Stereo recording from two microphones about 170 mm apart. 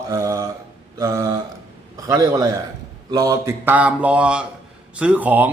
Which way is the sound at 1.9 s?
20° right (ahead or behind).